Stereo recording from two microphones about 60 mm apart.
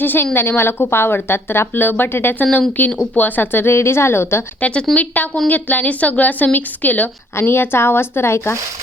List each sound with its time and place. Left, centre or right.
0.0 s speech: left
2.5 s a woman's voice: left
4.6 s a woman's voice: centre
4.9 s speech: left
7.3 s speech: left